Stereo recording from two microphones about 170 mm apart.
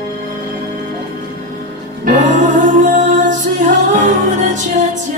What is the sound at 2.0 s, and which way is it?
Music, 50° right (ahead or behind).